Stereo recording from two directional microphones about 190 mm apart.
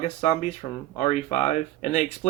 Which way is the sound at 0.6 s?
30° left (ahead or behind).